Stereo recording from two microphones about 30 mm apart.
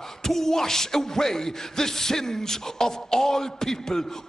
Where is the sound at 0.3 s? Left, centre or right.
Centre.